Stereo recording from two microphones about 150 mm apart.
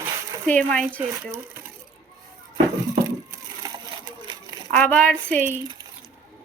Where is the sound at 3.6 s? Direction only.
25° right (ahead or behind).